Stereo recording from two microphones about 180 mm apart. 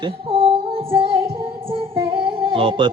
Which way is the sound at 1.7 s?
30° right (ahead or behind).